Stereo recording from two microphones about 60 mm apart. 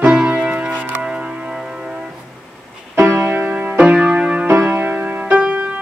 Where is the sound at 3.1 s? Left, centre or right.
Right.